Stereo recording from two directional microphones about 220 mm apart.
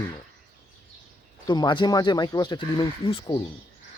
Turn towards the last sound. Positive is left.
turn(degrees=20)  # may be behind; listen again after turning